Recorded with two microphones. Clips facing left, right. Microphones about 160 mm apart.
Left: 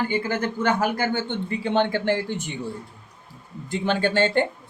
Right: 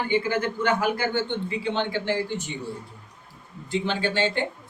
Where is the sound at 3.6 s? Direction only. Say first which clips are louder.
Left 3 dB; 50° left (ahead or behind).